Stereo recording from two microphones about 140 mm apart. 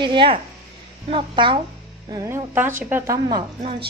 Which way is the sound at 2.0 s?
20° right (ahead or behind).